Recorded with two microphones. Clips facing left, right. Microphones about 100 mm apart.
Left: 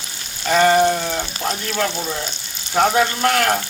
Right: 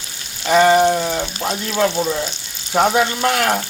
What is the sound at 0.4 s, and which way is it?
Speech, 10° right (ahead or behind).